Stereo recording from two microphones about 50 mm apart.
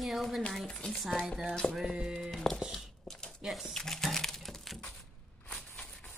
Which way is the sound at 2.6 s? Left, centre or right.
Centre.